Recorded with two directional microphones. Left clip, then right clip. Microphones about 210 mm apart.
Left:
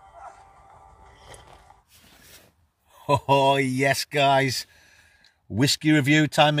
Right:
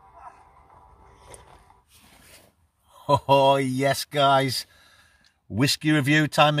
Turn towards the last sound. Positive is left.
turn(degrees=5)  # may be behind; listen again after turning